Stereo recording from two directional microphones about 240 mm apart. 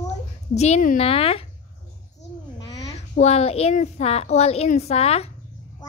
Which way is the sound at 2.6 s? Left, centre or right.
Centre.